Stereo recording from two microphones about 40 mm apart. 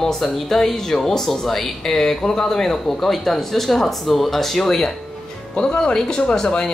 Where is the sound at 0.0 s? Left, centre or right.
Centre.